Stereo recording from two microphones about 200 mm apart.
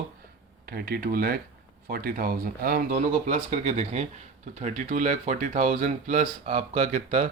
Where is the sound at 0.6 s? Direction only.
50° right (ahead or behind).